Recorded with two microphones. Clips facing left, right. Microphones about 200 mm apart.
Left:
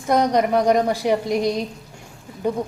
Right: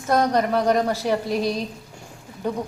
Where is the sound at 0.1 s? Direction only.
10° left (ahead or behind).